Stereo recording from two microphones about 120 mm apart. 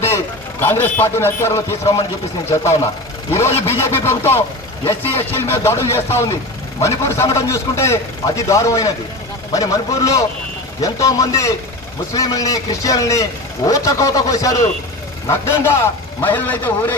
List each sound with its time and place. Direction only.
0.6 s a man's voice: 15° left (ahead or behind)